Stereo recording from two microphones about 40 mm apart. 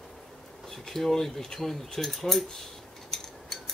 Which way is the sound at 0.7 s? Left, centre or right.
Centre.